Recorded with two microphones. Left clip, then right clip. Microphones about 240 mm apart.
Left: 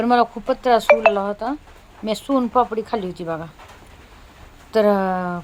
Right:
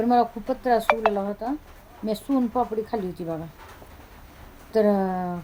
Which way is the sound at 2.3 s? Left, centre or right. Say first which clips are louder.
Left 7 dB; centre.